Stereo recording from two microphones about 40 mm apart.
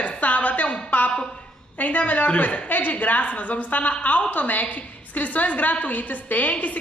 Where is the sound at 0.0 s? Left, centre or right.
Left.